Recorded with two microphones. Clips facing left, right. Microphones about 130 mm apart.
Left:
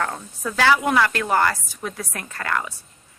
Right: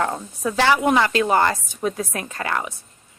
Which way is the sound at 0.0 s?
20° right (ahead or behind).